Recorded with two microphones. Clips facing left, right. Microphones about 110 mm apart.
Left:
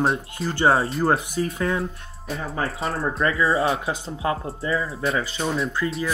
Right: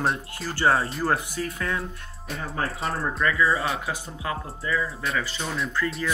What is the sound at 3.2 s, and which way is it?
Speech, 30° left (ahead or behind).